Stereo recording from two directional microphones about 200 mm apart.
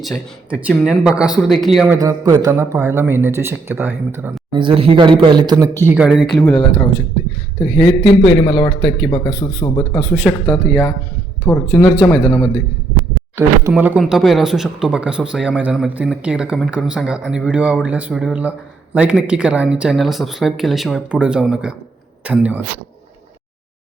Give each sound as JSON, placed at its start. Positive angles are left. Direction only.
{"t": 0.0, "sound": "speech", "side_deg": 0}
{"t": 1.9, "sound": "speech", "side_deg": -15}
{"t": 4.5, "sound": "speech", "side_deg": -25}
{"t": 6.4, "sound": "a man's voice", "side_deg": 20}
{"t": 7.9, "sound": "a man's voice", "side_deg": 25}
{"t": 10.0, "sound": "speech", "side_deg": -5}
{"t": 11.4, "sound": "speech", "side_deg": 15}
{"t": 13.3, "sound": "speech", "side_deg": -10}